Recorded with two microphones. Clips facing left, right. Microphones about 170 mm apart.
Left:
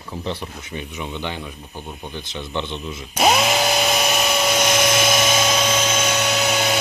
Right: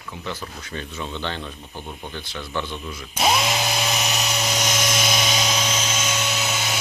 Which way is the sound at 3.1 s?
60° left (ahead or behind).